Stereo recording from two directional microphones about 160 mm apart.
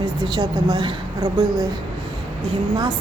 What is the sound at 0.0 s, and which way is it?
A woman's voice, 25° right (ahead or behind).